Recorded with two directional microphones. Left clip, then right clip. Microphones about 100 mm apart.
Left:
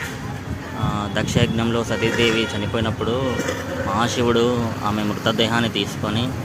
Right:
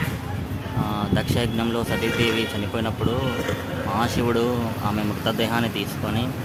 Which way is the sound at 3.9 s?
20° left (ahead or behind).